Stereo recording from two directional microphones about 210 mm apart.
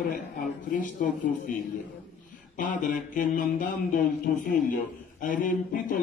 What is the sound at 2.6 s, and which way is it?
Speech, 40° left (ahead or behind).